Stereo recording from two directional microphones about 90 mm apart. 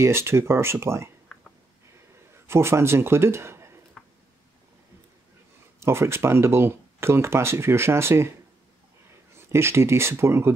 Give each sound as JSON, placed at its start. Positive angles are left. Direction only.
{"t": 0.0, "sound": "speech", "side_deg": -30}
{"t": 2.4, "sound": "a man's voice", "side_deg": -30}
{"t": 4.0, "sound": "a sound", "side_deg": 10}
{"t": 5.8, "sound": "speech", "side_deg": -30}
{"t": 9.5, "sound": "speech", "side_deg": -30}